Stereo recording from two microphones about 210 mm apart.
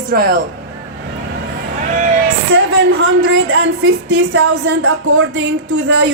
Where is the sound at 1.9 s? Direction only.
40° right (ahead or behind).